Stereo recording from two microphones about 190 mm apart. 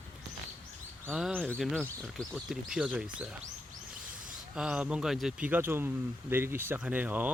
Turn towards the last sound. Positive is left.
turn(degrees=-10)  # may be behind; listen again after turning